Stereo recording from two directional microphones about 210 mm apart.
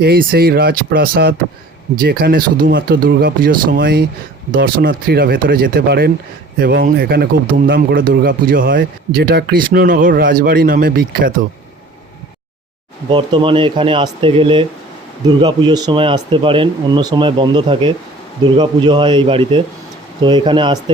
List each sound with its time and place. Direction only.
0.0 s speech: 45° right (ahead or behind)
13.1 s speech: 25° right (ahead or behind)